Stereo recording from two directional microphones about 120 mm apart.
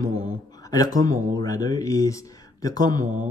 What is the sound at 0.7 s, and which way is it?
Speech, 30° left (ahead or behind).